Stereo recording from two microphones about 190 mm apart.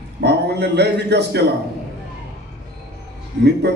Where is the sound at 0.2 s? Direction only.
60° right (ahead or behind).